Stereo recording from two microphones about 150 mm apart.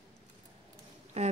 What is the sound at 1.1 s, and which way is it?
Speech, 45° right (ahead or behind).